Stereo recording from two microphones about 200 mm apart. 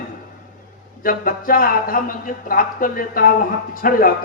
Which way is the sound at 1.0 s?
45° left (ahead or behind).